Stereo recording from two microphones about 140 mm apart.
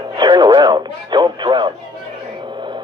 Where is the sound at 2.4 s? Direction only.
35° right (ahead or behind).